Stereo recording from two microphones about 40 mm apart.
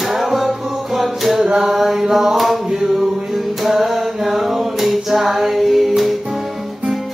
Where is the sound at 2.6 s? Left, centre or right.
Centre.